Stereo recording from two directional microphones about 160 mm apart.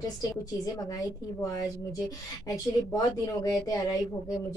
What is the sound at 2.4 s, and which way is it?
Speech, 20° left (ahead or behind).